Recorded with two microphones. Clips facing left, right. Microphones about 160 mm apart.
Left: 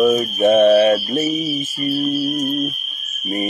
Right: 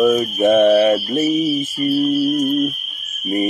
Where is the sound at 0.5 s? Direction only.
25° right (ahead or behind).